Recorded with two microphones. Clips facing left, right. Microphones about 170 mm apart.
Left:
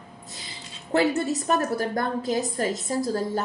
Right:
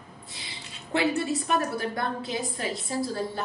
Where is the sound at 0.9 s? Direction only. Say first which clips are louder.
Left 3 dB; 40° left (ahead or behind).